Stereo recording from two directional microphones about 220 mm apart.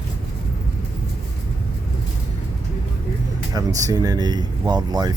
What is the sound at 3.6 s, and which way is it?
Speech, 15° right (ahead or behind).